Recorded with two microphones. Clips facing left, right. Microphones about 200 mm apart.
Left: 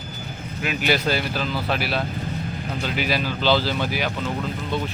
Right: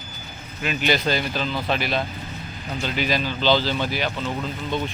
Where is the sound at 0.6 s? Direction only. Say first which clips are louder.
Even; 5° left (ahead or behind).